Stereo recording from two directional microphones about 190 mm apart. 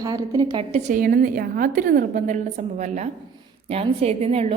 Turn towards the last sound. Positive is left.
turn(degrees=-30)  # may be behind; listen again after turning